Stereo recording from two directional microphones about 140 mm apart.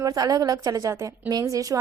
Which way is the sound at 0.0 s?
25° right (ahead or behind).